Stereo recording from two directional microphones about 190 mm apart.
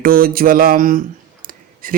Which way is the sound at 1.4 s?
50° right (ahead or behind).